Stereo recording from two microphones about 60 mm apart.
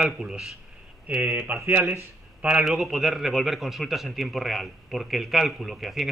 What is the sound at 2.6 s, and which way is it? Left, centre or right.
A man's voice, centre.